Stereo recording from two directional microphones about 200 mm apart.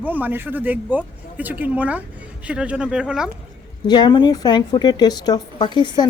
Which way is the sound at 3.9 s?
20° left (ahead or behind).